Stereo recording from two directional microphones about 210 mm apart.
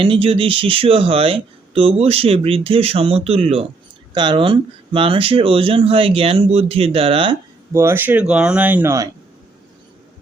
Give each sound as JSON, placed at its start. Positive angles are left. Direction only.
{"t": 0.0, "sound": "speech", "side_deg": -25}
{"t": 7.7, "sound": "speech", "side_deg": -10}